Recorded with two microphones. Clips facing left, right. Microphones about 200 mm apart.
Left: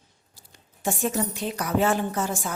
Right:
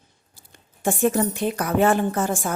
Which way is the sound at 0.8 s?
55° right (ahead or behind).